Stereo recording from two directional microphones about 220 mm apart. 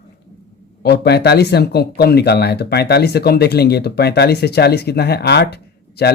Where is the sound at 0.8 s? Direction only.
50° left (ahead or behind).